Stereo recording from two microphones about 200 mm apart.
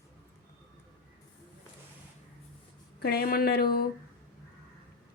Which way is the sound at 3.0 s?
50° left (ahead or behind).